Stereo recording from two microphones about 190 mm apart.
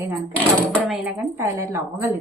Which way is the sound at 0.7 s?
5° left (ahead or behind).